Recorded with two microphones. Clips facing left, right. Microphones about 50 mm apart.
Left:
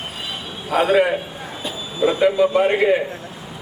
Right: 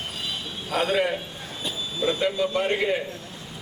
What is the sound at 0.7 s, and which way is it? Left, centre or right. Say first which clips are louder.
Speech: left 7 dB; left.